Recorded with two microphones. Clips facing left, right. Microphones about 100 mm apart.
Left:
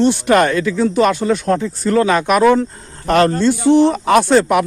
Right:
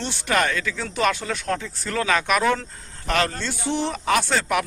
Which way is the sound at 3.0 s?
40° left (ahead or behind).